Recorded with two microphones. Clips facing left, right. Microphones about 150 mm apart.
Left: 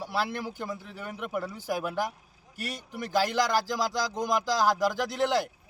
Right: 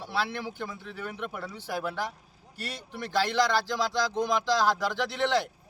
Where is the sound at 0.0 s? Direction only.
10° left (ahead or behind).